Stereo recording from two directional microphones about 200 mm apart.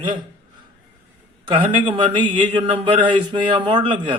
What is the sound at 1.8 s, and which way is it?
A man's voice, 25° right (ahead or behind).